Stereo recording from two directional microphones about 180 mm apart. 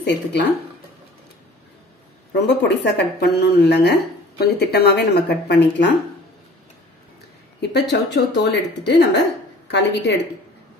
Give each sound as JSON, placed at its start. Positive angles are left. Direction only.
{"t": 0.0, "sound": "speech", "side_deg": 75}
{"t": 2.3, "sound": "speech", "side_deg": 75}
{"t": 7.9, "sound": "speech", "side_deg": 70}